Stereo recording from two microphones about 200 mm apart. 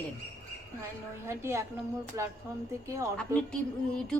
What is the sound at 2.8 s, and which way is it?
Speech, 15° right (ahead or behind).